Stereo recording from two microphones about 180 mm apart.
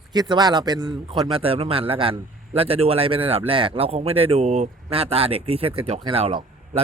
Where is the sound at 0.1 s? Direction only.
20° right (ahead or behind).